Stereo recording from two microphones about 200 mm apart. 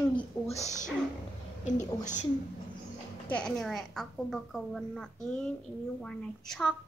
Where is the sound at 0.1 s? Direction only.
35° left (ahead or behind).